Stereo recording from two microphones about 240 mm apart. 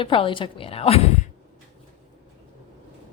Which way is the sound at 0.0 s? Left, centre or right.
Left.